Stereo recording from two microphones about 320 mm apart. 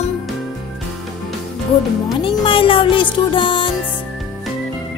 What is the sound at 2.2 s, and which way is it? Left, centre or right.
Music, centre.